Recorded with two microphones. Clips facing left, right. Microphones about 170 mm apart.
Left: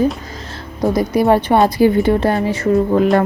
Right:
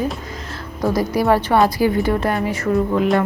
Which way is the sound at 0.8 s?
20° left (ahead or behind).